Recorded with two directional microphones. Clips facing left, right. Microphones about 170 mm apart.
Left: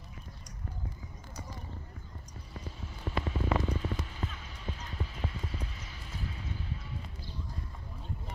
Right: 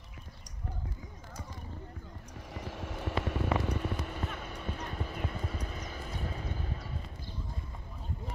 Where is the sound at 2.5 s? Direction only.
75° right (ahead or behind); by 6.7 s 45° right (ahead or behind).